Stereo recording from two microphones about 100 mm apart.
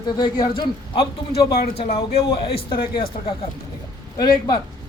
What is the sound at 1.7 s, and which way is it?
A man's voice, 75° left (ahead or behind).